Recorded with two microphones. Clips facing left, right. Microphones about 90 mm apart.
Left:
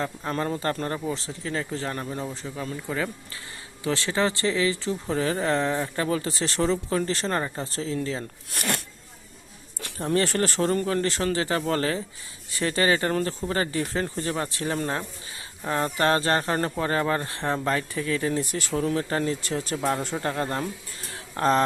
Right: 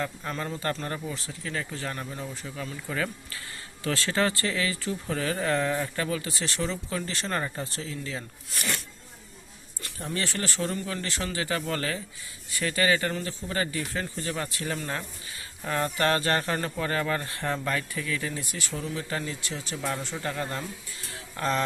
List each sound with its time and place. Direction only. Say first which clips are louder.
0.0 s speech: left 4 dB; 40° left (ahead or behind)
8.4 s speech: left 3 dB; 55° left (ahead or behind)
10.2 s speech: left 7 dB; 40° left (ahead or behind)
21.1 s a sound: left 6 dB; 40° left (ahead or behind)